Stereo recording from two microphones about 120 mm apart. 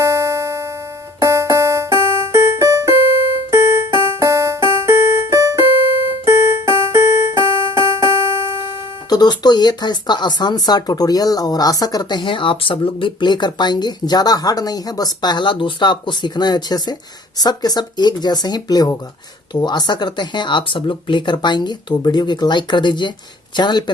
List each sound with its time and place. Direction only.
0.0 s music: 25° right (ahead or behind)
9.0 s speech: 35° left (ahead or behind)